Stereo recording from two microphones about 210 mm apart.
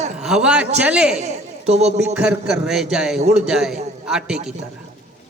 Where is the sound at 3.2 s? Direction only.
35° right (ahead or behind).